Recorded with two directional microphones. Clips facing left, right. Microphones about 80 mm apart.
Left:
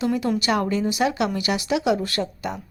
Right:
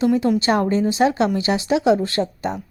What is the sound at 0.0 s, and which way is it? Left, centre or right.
A woman's voice, right.